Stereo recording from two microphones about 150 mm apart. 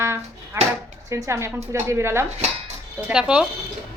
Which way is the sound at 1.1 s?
20° right (ahead or behind).